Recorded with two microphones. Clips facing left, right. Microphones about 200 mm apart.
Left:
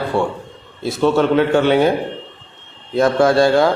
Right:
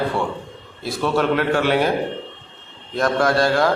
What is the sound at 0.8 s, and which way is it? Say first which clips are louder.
Speech: left 5 dB; 25° left (ahead or behind).